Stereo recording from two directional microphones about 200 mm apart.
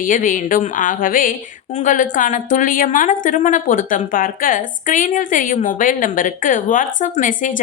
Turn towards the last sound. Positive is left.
turn(degrees=40)  # may be behind; listen again after turning